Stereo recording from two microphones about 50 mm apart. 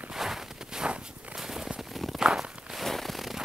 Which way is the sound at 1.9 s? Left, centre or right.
Centre.